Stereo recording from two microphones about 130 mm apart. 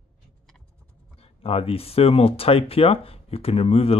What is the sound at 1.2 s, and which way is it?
Speech, 50° left (ahead or behind).